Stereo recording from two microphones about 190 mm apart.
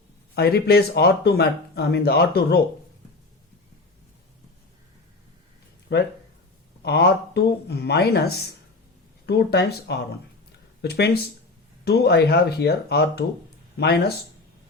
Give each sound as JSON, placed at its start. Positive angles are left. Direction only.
{"t": 0.3, "sound": "speech", "side_deg": 55}
{"t": 5.9, "sound": "speech", "side_deg": 65}